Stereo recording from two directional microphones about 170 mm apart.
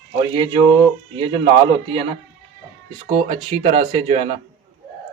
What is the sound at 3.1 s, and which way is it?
Speech, 35° right (ahead or behind).